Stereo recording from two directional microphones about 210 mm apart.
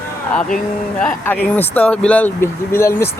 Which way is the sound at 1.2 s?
10° left (ahead or behind).